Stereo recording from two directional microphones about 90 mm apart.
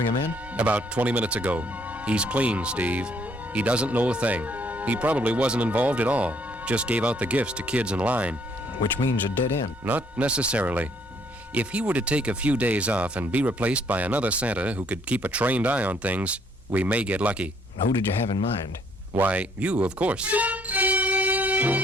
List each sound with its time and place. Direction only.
0.5 s speech: 15° right (ahead or behind)
8.8 s speech: 60° left (ahead or behind)
9.8 s speech: 15° right (ahead or behind)
19.1 s music: 20° right (ahead or behind)